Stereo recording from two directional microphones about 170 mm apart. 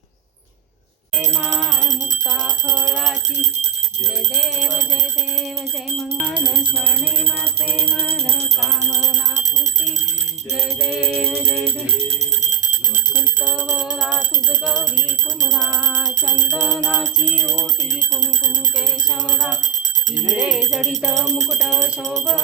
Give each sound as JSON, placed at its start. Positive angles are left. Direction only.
{"t": 1.5, "sound": "music", "side_deg": 0}
{"t": 6.6, "sound": "music", "side_deg": -10}
{"t": 7.8, "sound": "music", "side_deg": 5}
{"t": 10.8, "sound": "music", "side_deg": 0}
{"t": 12.5, "sound": "bicycle bell", "side_deg": -55}
{"t": 13.4, "sound": "music", "side_deg": -5}
{"t": 16.7, "sound": "music", "side_deg": 5}
{"t": 20.3, "sound": "music", "side_deg": -5}